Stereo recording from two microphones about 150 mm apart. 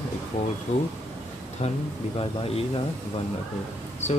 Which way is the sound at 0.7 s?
50° left (ahead or behind).